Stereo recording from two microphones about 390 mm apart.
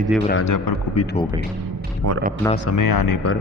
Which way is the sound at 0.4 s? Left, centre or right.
Left.